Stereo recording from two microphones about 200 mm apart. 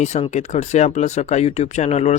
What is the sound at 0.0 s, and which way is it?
Speech, 35° left (ahead or behind).